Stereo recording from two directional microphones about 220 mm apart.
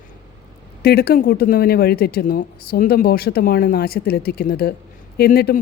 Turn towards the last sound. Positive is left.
turn(degrees=45)  # may be behind; listen again after turning